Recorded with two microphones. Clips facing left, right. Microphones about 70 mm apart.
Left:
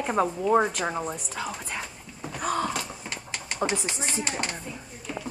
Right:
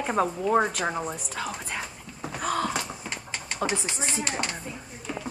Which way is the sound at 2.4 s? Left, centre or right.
Centre.